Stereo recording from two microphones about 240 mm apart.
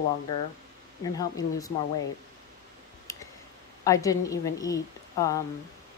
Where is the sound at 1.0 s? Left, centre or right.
Centre.